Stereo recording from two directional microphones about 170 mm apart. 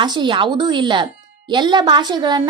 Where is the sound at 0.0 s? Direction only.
25° right (ahead or behind).